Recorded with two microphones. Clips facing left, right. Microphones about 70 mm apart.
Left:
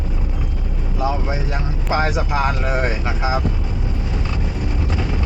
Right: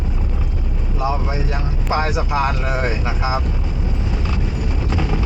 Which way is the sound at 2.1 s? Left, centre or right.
Centre.